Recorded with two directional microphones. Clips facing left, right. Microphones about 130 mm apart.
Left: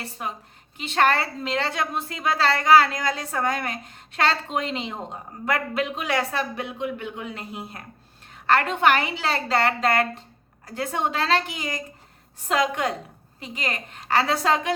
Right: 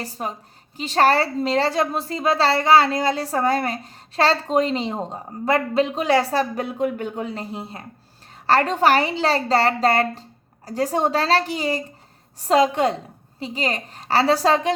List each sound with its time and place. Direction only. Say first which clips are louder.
0.0 s a woman's voice: right 4 dB; 35° right (ahead or behind)